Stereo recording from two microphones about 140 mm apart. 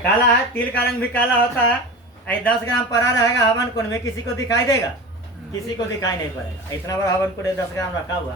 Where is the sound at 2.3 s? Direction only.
15° left (ahead or behind).